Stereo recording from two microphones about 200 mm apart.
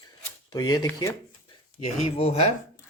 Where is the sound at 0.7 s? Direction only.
20° left (ahead or behind).